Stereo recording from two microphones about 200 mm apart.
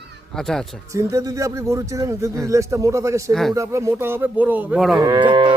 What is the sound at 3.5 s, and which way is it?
Speech, 15° right (ahead or behind).